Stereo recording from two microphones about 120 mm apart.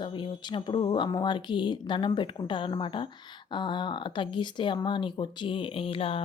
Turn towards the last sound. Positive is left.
turn(degrees=50)  # may be behind; listen again after turning